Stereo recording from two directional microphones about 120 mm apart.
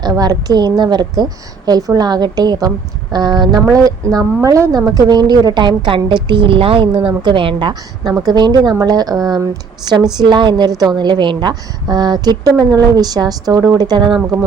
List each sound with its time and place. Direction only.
0.0 s a woman's voice: 30° right (ahead or behind)